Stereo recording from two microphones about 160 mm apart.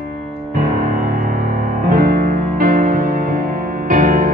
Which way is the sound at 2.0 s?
60° right (ahead or behind).